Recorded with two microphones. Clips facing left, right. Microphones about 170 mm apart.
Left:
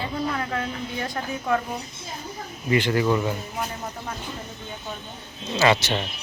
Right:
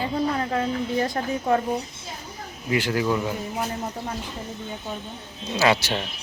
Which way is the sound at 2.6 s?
5° right (ahead or behind).